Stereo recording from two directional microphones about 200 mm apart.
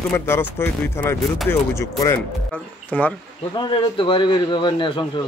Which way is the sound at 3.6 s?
25° left (ahead or behind).